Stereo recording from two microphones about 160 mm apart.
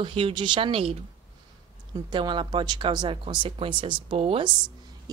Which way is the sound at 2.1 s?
30° right (ahead or behind).